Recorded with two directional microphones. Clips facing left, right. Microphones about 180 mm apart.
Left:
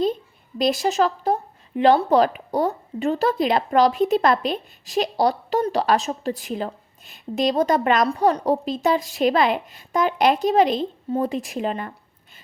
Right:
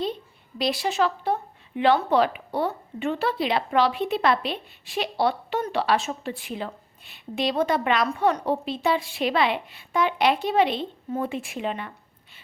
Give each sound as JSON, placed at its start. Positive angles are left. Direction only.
{"t": 0.6, "sound": "speech", "side_deg": 45}